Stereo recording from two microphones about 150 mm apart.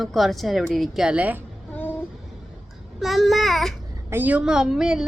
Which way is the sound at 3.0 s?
Centre (ahead or behind).